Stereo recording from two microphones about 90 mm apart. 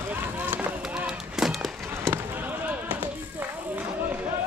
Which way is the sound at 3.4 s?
20° right (ahead or behind).